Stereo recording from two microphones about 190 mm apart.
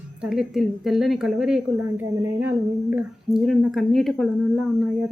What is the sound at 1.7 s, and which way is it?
A woman's voice, 15° right (ahead or behind).